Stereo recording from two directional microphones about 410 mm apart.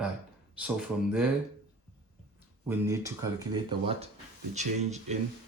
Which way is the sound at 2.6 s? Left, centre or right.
Centre.